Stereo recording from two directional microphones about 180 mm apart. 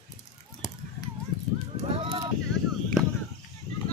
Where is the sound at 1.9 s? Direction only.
35° right (ahead or behind).